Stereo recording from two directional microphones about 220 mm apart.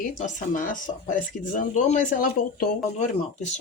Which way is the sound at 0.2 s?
35° left (ahead or behind).